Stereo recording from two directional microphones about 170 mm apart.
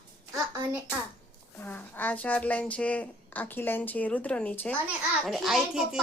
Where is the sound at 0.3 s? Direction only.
25° right (ahead or behind).